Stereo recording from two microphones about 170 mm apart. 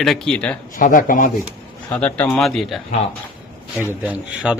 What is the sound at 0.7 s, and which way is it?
Speech, 55° left (ahead or behind).